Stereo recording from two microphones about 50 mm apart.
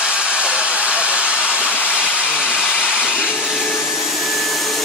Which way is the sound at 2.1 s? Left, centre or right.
Centre.